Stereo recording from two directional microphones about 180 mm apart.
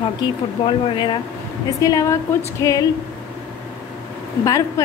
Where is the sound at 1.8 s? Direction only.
20° left (ahead or behind).